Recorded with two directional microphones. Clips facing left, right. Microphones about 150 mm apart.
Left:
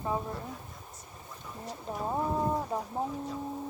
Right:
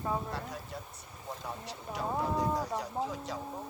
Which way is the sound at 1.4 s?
80° right.